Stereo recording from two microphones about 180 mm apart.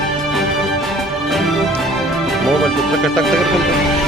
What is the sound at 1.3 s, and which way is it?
Music, centre (ahead or behind).